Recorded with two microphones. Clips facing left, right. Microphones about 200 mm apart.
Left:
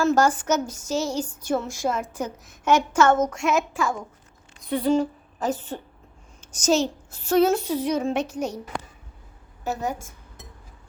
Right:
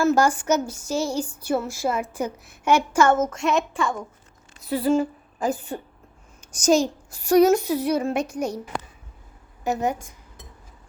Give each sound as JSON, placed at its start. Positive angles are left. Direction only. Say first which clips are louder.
{"t": 0.0, "sound": "a woman's voice", "louder": "right 1 dB", "side_deg": -10}
{"t": 9.6, "sound": "speech", "louder": "right 4 dB", "side_deg": -15}